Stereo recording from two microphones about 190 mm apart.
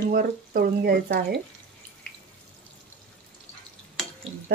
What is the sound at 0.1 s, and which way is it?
Speech, 50° right (ahead or behind).